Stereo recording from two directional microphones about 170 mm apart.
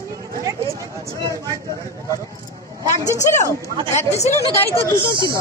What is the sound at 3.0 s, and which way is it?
A woman's voice, 45° left (ahead or behind).